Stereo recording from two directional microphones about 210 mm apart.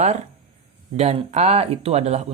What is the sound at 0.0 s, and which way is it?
Speech, 30° right (ahead or behind).